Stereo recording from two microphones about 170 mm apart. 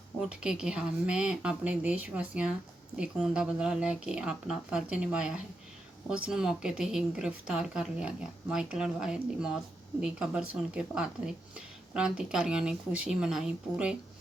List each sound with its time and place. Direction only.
0.2 s speech: 5° right (ahead or behind)